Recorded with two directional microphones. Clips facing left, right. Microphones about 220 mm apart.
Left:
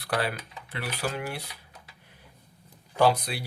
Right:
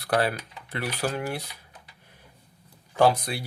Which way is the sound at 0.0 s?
40° right (ahead or behind).